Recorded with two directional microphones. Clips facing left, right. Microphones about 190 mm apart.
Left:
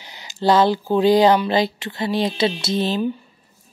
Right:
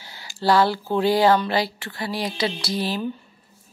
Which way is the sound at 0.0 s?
20° left (ahead or behind).